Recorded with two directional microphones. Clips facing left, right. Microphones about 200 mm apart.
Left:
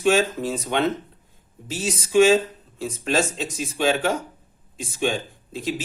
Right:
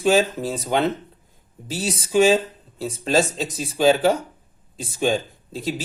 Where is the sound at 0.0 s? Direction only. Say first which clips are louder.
Right 1 dB; 35° right (ahead or behind).